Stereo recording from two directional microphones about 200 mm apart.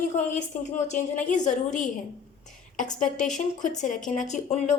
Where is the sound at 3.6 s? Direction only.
40° left (ahead or behind).